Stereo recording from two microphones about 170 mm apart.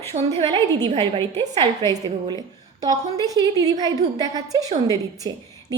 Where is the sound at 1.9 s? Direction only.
25° right (ahead or behind).